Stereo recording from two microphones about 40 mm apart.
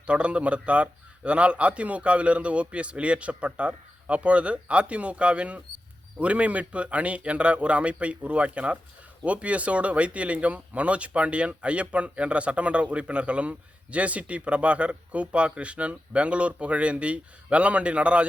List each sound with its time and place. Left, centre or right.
0.0 s speech: right